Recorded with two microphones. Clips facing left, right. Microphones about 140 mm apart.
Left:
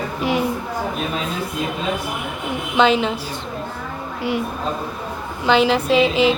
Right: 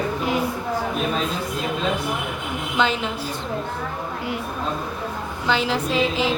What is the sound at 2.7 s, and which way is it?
Speech, 80° left.